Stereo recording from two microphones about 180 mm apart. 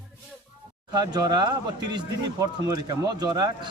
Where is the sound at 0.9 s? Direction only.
25° right (ahead or behind).